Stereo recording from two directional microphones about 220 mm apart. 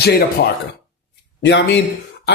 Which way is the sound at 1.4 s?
55° left (ahead or behind).